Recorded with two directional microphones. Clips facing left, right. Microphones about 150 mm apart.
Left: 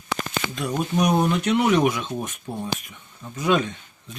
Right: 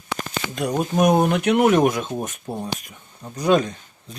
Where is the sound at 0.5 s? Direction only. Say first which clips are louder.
Right 4 dB; 45° right (ahead or behind).